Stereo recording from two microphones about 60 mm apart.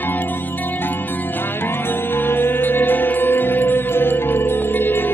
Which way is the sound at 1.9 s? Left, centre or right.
Left.